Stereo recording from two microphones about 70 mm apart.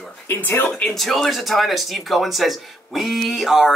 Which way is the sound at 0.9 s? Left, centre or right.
Centre.